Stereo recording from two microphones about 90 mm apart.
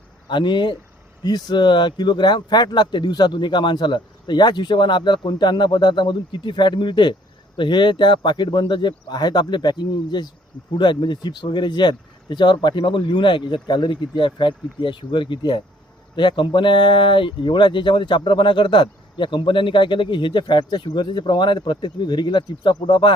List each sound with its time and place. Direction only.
0.3 s speech: 55° left (ahead or behind)